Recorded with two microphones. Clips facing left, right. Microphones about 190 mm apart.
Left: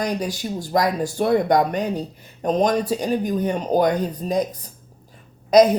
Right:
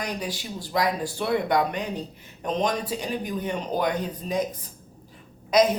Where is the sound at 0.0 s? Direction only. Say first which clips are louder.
Left 7 dB; 40° left (ahead or behind).